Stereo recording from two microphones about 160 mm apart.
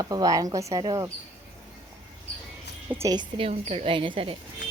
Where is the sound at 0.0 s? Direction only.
25° right (ahead or behind).